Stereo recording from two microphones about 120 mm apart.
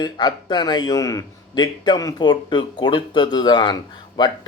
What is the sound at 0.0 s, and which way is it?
Speech, 40° left (ahead or behind).